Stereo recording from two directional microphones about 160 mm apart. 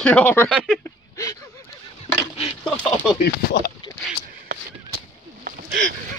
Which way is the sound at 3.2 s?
70° left (ahead or behind).